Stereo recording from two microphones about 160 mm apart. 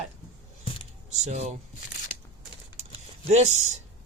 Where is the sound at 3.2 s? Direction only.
45° right (ahead or behind).